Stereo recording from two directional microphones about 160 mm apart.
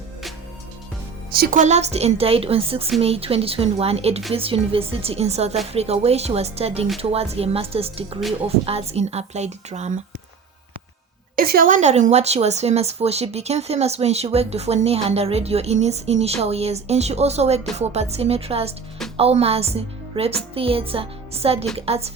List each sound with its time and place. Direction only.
1.3 s speech: 65° right (ahead or behind); by 10.0 s 45° right (ahead or behind)
11.3 s speech: 65° right (ahead or behind); by 22.1 s 40° right (ahead or behind)